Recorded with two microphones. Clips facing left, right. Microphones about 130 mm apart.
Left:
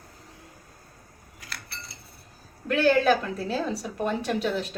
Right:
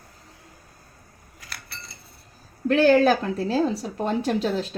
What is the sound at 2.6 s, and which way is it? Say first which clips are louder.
Speech: right 4 dB; 35° right (ahead or behind).